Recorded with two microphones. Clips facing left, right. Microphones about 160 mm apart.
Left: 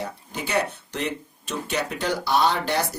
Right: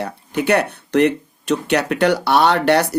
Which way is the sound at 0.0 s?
65° right (ahead or behind).